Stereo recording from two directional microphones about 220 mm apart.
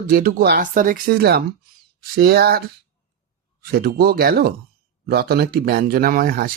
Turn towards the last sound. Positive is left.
turn(degrees=-40)  # may be behind; listen again after turning